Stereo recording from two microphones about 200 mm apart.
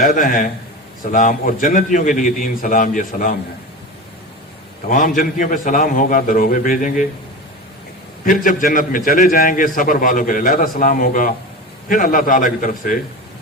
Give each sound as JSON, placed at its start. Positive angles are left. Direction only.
{"t": 0.0, "sound": "a man's voice", "side_deg": 45}
{"t": 4.9, "sound": "a man's voice", "side_deg": 40}
{"t": 8.2, "sound": "a man's voice", "side_deg": 45}